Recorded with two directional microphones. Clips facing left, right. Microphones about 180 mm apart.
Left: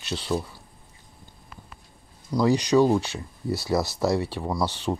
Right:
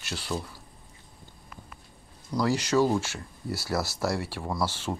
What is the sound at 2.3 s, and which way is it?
Speech, 20° left (ahead or behind).